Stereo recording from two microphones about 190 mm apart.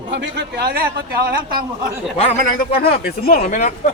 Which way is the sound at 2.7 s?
55° left (ahead or behind).